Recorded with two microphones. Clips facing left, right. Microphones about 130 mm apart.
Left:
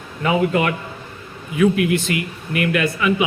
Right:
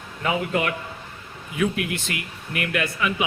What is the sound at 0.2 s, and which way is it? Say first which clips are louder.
Speech: left 6 dB; 90° left.